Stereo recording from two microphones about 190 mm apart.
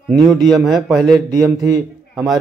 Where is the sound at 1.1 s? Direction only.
20° right (ahead or behind).